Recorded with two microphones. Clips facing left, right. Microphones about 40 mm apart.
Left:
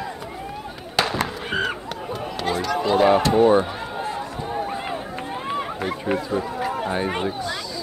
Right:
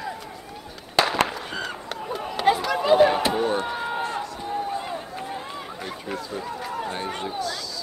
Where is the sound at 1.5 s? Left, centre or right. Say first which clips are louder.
Left 7 dB; left.